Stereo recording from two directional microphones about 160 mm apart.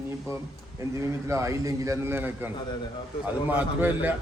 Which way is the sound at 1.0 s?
20° right (ahead or behind).